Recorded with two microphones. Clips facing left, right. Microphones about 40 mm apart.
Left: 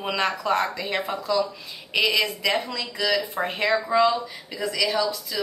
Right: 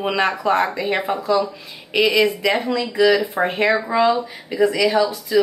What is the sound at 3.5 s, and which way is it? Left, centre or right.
Speech, right.